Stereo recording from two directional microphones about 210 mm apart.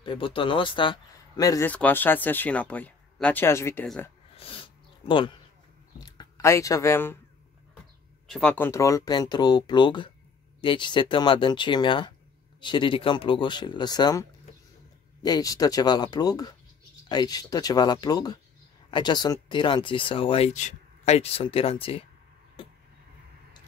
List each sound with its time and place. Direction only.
0.0 s speech: 25° left (ahead or behind); by 4.1 s 5° left (ahead or behind)
4.4 s a sound: 25° left (ahead or behind)
5.9 s speech: 20° left (ahead or behind)
8.3 s speech: 5° left (ahead or behind)
15.2 s speech: 15° left (ahead or behind)